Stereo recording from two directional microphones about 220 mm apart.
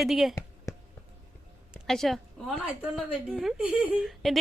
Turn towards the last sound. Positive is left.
turn(degrees=0)  # may be behind; listen again after turning